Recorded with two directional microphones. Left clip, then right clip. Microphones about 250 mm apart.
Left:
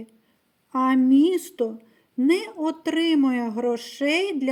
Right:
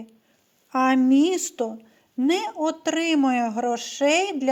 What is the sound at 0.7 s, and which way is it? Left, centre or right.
Speech, centre.